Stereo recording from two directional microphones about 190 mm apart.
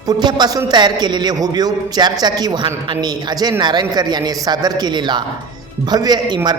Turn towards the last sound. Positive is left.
turn(degrees=-20)  # may be behind; listen again after turning